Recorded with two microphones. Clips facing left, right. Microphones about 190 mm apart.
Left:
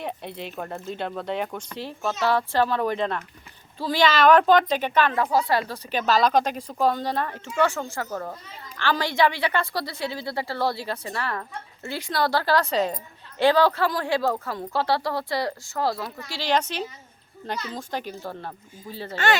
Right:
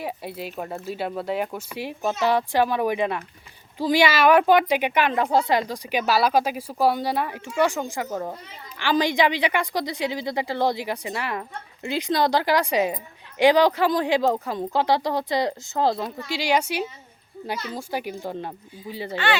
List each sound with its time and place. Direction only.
0.0 s a woman's voice: 5° right (ahead or behind); by 16.4 s 25° right (ahead or behind)
16.4 s a woman's voice: 10° right (ahead or behind)
19.1 s speech: 45° left (ahead or behind)